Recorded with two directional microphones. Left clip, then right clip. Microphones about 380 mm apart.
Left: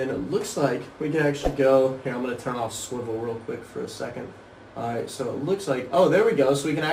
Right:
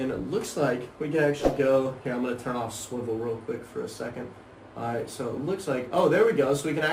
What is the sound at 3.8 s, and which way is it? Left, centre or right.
Speech, centre.